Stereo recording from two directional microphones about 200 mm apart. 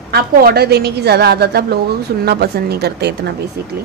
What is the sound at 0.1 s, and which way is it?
A woman's voice, 50° right (ahead or behind).